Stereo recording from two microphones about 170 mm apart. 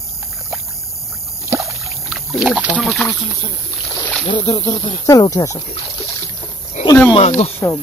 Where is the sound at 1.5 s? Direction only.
15° right (ahead or behind).